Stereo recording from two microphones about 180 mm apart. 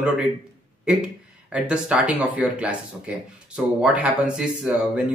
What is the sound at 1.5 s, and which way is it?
Speech, 5° right (ahead or behind).